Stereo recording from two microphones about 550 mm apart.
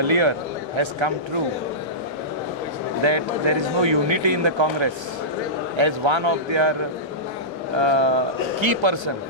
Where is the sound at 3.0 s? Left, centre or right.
Right.